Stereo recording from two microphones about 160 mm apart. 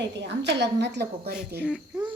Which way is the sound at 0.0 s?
90° right.